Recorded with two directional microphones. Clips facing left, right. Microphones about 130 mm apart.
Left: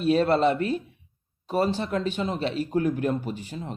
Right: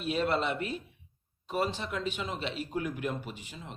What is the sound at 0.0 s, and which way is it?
Speech, 35° left (ahead or behind).